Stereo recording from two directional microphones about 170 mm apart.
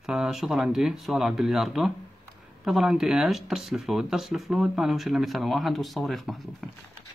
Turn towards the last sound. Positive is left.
turn(degrees=0)  # may be behind; listen again after turning